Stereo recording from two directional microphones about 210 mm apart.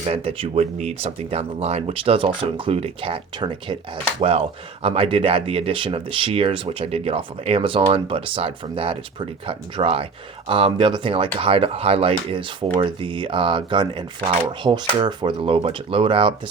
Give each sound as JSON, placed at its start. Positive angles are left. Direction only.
{"t": 0.0, "sound": "speech", "side_deg": -30}